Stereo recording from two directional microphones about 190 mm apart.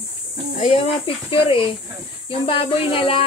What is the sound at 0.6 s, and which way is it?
Speech, 30° left (ahead or behind).